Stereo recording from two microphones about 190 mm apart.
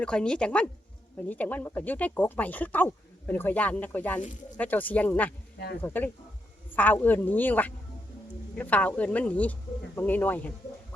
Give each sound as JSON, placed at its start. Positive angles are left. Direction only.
{"t": 0.0, "sound": "speech", "side_deg": 5}
{"t": 5.5, "sound": "speech", "side_deg": 60}
{"t": 5.8, "sound": "speech", "side_deg": 10}